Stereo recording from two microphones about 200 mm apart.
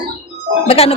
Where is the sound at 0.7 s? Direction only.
30° left (ahead or behind).